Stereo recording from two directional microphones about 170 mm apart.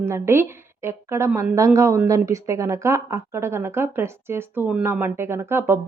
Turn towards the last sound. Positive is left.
turn(degrees=-15)  # may be behind; listen again after turning